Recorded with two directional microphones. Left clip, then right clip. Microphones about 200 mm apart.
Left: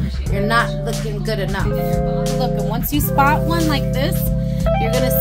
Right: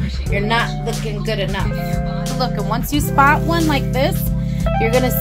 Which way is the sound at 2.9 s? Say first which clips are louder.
Right 2 dB; 15° left (ahead or behind).